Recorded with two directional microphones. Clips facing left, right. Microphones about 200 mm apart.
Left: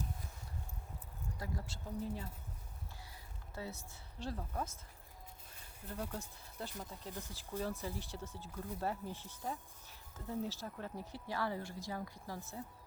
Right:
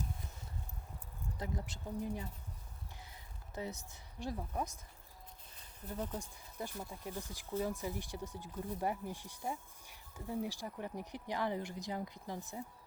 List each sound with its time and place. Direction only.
1.4 s speech: 20° right (ahead or behind)
3.5 s speech: 20° right (ahead or behind)
6.1 s speech: 15° right (ahead or behind)